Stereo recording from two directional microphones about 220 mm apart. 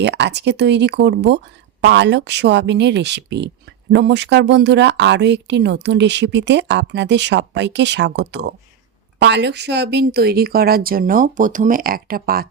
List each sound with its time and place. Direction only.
0.0 s speech: 50° right (ahead or behind)